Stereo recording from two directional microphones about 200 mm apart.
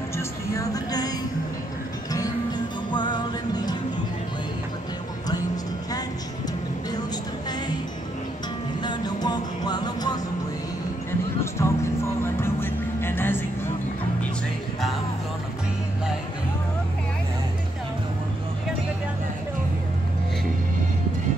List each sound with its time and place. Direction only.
0.6 s music: 20° left (ahead or behind)
2.9 s music: 20° left (ahead or behind)
8.8 s music: 20° left (ahead or behind)
11.6 s music: 15° left (ahead or behind)